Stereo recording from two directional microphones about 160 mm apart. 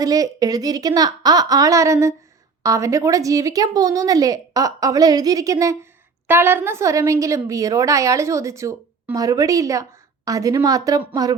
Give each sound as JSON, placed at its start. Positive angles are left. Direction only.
{"t": 0.0, "sound": "a woman's voice", "side_deg": -20}